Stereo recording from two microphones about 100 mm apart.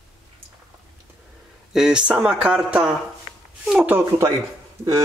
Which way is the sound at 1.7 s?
5° right (ahead or behind).